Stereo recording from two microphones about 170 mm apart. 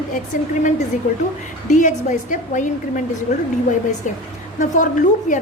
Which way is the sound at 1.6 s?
45° left (ahead or behind).